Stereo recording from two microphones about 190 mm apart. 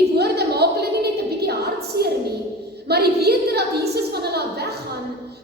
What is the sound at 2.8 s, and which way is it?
A woman's voice, 55° right (ahead or behind).